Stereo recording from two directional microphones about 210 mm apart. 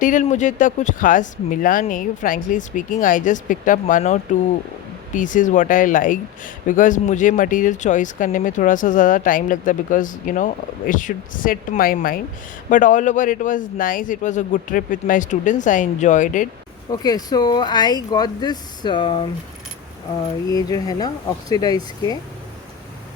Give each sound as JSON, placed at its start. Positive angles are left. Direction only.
{"t": 0.0, "sound": "speech", "side_deg": 35}
{"t": 16.9, "sound": "speech", "side_deg": 20}
{"t": 20.5, "sound": "speech", "side_deg": 15}